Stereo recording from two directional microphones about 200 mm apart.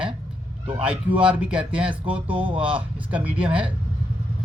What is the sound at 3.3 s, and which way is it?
Speech, 25° right (ahead or behind).